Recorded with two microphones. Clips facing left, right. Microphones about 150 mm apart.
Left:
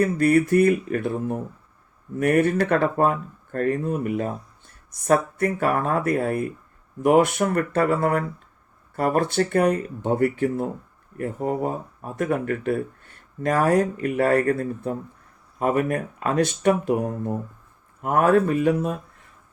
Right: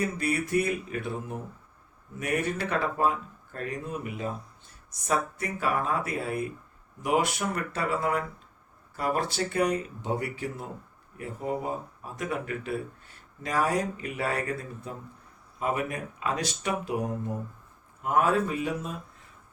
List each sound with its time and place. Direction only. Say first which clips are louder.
0.0 s speech: left 10 dB; 55° left (ahead or behind)
18.0 s speech: left 6 dB; 55° left (ahead or behind)